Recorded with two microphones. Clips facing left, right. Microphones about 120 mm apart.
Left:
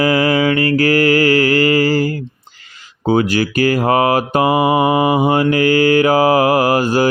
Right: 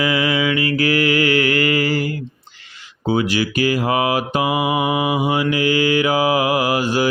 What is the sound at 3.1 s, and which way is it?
Mantra, 45° left (ahead or behind).